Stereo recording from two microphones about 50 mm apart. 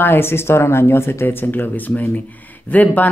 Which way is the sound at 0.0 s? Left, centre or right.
Left.